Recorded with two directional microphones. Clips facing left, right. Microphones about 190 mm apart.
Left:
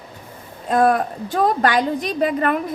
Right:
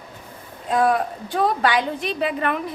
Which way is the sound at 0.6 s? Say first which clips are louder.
Left 3 dB; 45° left (ahead or behind).